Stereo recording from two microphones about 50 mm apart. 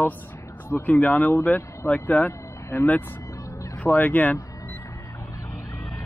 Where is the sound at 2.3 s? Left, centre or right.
Left.